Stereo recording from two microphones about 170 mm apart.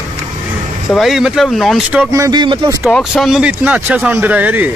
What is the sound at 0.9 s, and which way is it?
Speech, centre (ahead or behind).